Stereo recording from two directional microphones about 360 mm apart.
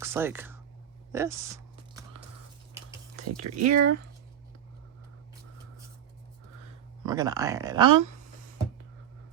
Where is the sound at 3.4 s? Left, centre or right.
Right.